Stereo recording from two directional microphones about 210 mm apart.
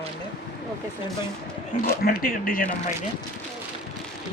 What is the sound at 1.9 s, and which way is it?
Speech, 45° left (ahead or behind).